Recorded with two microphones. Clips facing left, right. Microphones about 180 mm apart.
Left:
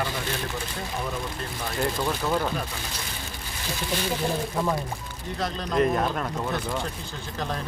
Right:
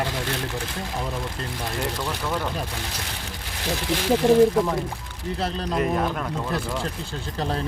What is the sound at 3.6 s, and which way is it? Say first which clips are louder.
Speech: right 4 dB; 80° right.